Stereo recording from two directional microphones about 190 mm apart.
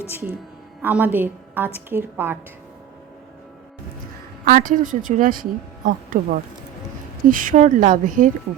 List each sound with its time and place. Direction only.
0.8 s a woman's voice: 10° right (ahead or behind)
4.4 s speech: 45° right (ahead or behind)
7.3 s speech: 45° right (ahead or behind)